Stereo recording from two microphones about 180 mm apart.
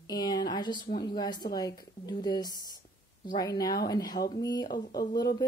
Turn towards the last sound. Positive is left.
turn(degrees=20)  # may be behind; listen again after turning